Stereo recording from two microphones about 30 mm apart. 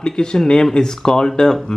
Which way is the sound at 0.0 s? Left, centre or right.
Left.